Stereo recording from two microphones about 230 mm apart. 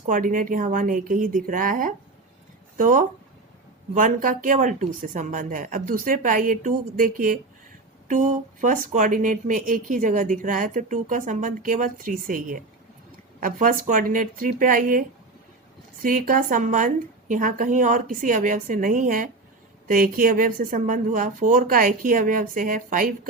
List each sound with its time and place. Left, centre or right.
0.0 s speech: right